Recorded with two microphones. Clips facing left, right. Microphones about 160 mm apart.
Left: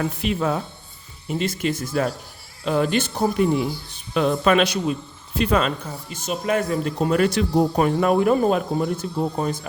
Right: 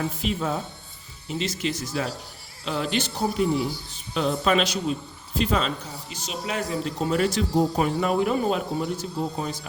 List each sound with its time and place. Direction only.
0.0 s speech: 65° left (ahead or behind)
1.3 s a man's voice: 50° left (ahead or behind)